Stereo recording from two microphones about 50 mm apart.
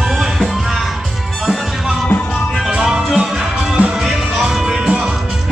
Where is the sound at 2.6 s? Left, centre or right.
Centre.